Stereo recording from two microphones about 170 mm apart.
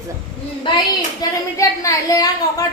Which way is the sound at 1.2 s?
20° left (ahead or behind).